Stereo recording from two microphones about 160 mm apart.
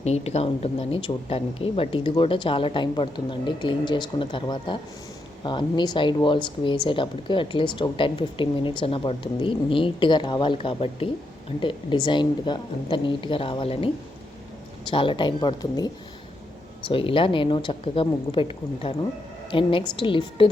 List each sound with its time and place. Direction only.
0.0 s speech: 40° left (ahead or behind); by 15.9 s 25° left (ahead or behind)
16.9 s speech: 35° left (ahead or behind)